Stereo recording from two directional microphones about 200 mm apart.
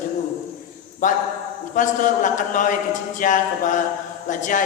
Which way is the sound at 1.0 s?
40° left (ahead or behind).